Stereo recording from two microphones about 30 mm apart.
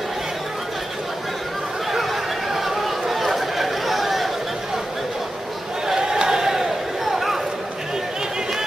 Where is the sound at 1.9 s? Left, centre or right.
Centre.